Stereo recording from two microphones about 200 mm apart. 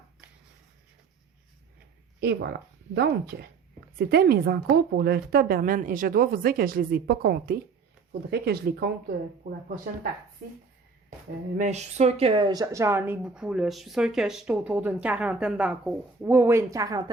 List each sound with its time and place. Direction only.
2.2 s a woman's voice: 55° right (ahead or behind)
11.5 s speech: 35° right (ahead or behind); by 17.0 s 15° right (ahead or behind)